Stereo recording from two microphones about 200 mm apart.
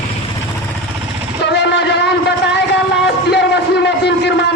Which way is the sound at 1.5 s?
60° left (ahead or behind).